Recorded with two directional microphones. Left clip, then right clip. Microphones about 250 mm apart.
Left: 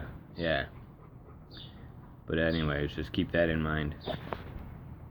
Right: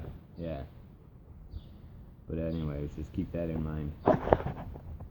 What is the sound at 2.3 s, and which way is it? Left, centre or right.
Speech, centre.